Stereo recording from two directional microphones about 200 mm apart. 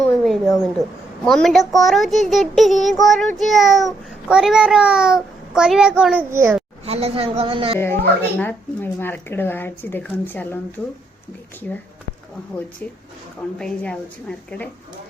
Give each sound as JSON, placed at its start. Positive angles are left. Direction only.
{"t": 0.0, "sound": "a woman's voice", "side_deg": 5}
{"t": 6.8, "sound": "a woman's voice", "side_deg": -30}
{"t": 8.4, "sound": "speech", "side_deg": 10}
{"t": 13.6, "sound": "a child's voice", "side_deg": 5}